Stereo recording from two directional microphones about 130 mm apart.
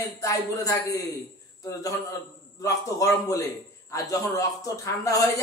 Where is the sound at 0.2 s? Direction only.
25° left (ahead or behind).